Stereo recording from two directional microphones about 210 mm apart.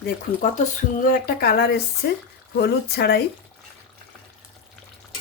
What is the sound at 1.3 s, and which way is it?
Speech, 50° left (ahead or behind).